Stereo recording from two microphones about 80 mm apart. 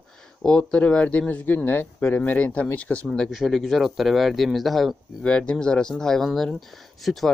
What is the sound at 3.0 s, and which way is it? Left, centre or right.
Speech, centre.